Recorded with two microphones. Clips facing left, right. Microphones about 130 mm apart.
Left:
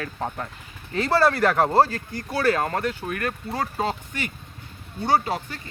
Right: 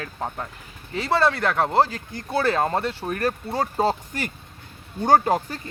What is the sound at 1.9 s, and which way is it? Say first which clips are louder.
Speech: even; 20° right (ahead or behind).